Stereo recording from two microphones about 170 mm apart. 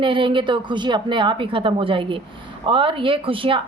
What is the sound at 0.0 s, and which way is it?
A woman's voice, 30° right (ahead or behind).